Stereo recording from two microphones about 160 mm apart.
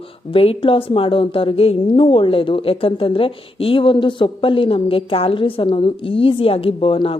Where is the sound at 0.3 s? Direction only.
35° left (ahead or behind).